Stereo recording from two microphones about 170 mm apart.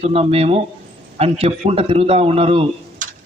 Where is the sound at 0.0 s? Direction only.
35° right (ahead or behind).